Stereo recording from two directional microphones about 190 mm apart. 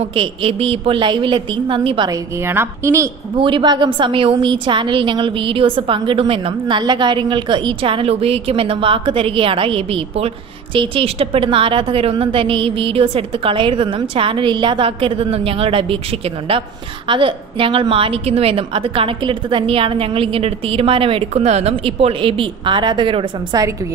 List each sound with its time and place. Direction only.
0.0 s a woman's voice: 30° right (ahead or behind)
2.4 s a woman's voice: 10° right (ahead or behind)
3.3 s a woman's voice: 25° right (ahead or behind)
17.1 s a woman's voice: 25° right (ahead or behind)